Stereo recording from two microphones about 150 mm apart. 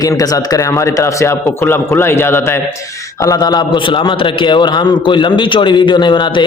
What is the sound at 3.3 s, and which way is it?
A man's voice, 25° left (ahead or behind).